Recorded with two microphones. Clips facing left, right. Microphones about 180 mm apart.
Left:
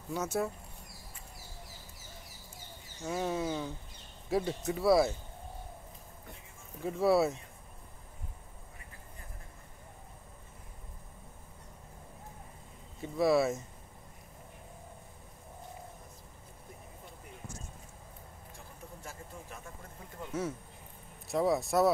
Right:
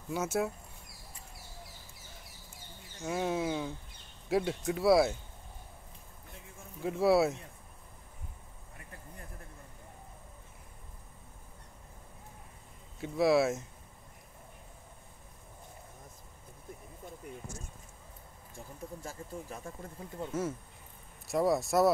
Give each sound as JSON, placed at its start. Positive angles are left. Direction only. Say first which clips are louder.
{"t": 0.1, "sound": "speech", "louder": "right 1 dB", "side_deg": -5}
{"t": 3.0, "sound": "speech", "louder": "right 1 dB", "side_deg": -5}
{"t": 6.8, "sound": "speech", "louder": "right 1 dB", "side_deg": -5}
{"t": 13.0, "sound": "speech", "louder": "right 1 dB", "side_deg": -5}
{"t": 19.0, "sound": "speech", "louder": "right 3 dB", "side_deg": -35}
{"t": 21.3, "sound": "speech", "louder": "right 1 dB", "side_deg": 0}